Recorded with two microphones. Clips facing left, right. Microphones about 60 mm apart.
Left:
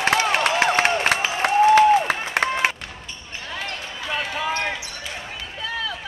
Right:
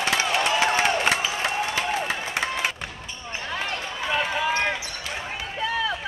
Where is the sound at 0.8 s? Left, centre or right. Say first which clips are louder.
Left 2 dB; left.